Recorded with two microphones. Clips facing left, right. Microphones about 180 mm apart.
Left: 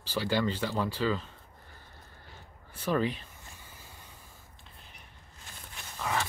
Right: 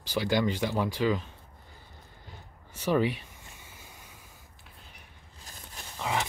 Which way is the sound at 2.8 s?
15° right (ahead or behind).